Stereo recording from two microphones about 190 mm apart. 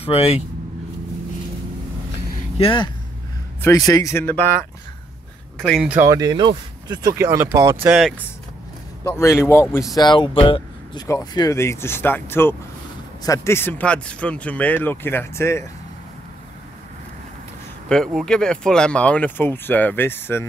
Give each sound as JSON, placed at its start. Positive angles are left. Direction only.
{"t": 0.0, "sound": "speech", "side_deg": 30}
{"t": 2.5, "sound": "speech", "side_deg": 25}
{"t": 5.6, "sound": "speech", "side_deg": 0}
{"t": 5.9, "sound": "speech", "side_deg": -20}
{"t": 7.8, "sound": "speech", "side_deg": -5}
{"t": 9.0, "sound": "speech", "side_deg": 15}
{"t": 11.1, "sound": "speech", "side_deg": 20}
{"t": 17.8, "sound": "speech", "side_deg": 5}